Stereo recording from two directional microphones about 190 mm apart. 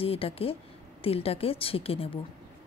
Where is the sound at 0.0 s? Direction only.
30° left (ahead or behind).